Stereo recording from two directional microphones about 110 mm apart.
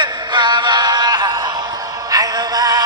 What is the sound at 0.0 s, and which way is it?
Synthetic singing, 45° right (ahead or behind).